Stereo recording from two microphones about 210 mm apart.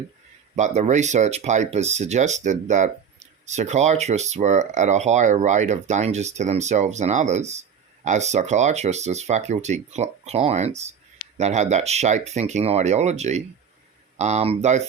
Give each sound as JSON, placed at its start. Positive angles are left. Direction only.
{"t": 0.5, "sound": "speech", "side_deg": -35}